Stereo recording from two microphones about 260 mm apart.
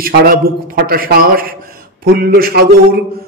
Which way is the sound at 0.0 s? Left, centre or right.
Right.